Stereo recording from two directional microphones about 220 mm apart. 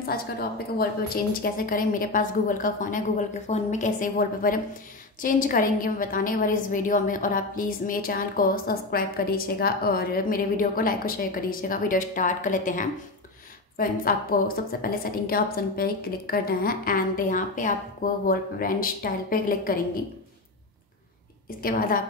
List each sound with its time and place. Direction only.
0.0 s a woman's voice: 45° left (ahead or behind)
21.5 s a woman's voice: 40° left (ahead or behind)